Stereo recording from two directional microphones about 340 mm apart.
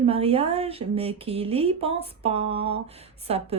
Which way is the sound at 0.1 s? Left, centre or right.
Centre.